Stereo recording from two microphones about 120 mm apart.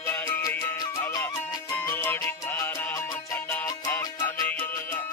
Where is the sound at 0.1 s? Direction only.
15° left (ahead or behind).